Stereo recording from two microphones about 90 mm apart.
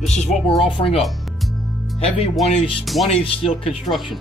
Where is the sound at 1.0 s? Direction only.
Centre (ahead or behind).